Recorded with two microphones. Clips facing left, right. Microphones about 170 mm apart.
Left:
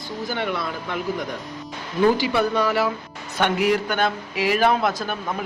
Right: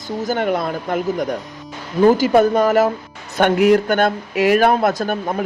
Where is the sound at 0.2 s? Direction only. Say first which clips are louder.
Right 7 dB; 45° right (ahead or behind).